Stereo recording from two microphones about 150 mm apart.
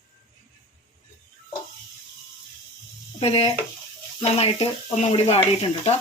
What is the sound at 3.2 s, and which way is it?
Speech, 40° left (ahead or behind).